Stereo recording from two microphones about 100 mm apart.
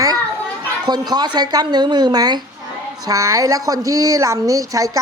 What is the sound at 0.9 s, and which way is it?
Speech, 45° right (ahead or behind).